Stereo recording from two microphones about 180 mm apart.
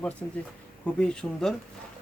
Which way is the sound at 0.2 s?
5° left (ahead or behind).